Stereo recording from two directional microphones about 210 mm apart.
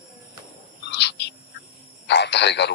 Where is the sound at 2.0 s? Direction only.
55° left (ahead or behind).